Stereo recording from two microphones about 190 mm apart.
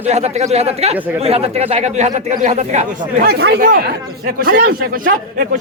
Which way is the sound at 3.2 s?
55° right (ahead or behind).